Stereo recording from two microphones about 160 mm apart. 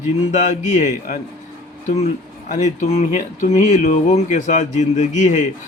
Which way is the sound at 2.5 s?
50° left (ahead or behind).